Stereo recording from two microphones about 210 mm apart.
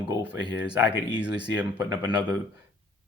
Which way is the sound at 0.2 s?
60° left (ahead or behind).